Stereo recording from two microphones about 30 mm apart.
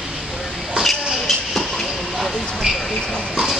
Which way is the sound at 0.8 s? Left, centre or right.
Right.